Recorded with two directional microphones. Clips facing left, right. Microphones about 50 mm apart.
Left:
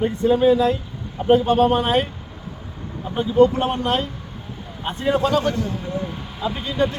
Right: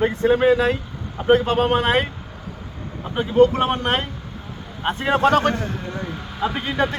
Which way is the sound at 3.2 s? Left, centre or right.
Right.